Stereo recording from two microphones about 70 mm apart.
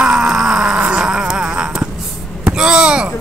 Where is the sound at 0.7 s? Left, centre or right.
Centre.